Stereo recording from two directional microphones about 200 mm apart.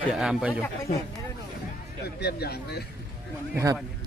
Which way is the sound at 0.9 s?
40° left (ahead or behind).